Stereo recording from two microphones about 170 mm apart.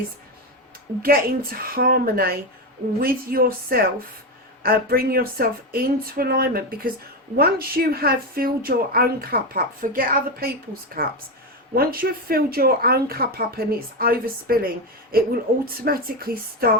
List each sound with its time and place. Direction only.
1.0 s a woman's voice: 60° right (ahead or behind)